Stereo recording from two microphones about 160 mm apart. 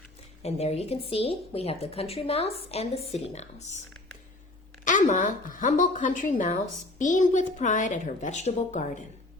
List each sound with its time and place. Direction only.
0.4 s a woman's voice: 40° left (ahead or behind)
4.9 s a woman's voice: 50° left (ahead or behind)